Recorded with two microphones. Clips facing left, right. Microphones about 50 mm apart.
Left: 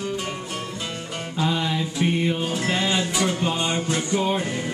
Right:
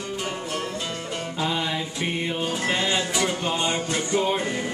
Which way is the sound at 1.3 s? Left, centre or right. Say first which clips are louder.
Left 3 dB; centre.